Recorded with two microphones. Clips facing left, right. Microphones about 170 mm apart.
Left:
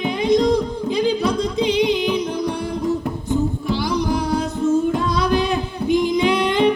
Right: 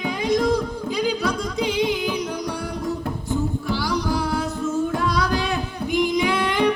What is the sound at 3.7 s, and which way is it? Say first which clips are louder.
Music: left 3 dB; 20° left (ahead or behind).